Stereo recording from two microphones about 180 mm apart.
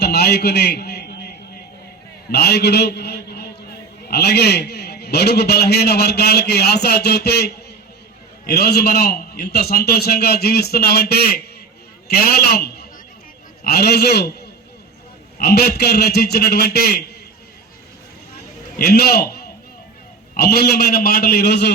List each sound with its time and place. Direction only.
0.0 s a sound: 65° left (ahead or behind)
2.3 s a man's voice: 65° left (ahead or behind)
15.4 s a man's voice: 60° left (ahead or behind)
18.8 s a man's voice: 60° left (ahead or behind)